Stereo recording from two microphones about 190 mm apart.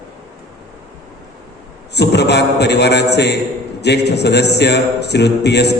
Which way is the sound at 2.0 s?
60° left (ahead or behind).